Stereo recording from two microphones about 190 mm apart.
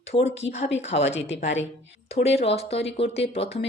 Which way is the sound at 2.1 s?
35° left (ahead or behind).